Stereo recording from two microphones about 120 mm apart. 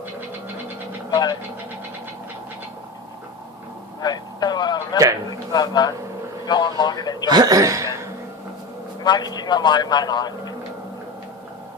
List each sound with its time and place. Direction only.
1.1 s speech: 35° left (ahead or behind)
4.0 s vehicle: 35° left (ahead or behind)
5.3 s a sound: 35° left (ahead or behind)
7.3 s chuckle: 35° right (ahead or behind)
9.0 s a man's voice: 35° left (ahead or behind)